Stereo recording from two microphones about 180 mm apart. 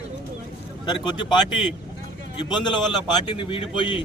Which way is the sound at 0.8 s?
25° left (ahead or behind).